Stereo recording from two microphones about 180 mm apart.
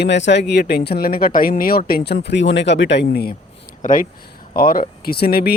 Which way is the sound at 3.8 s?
50° left (ahead or behind).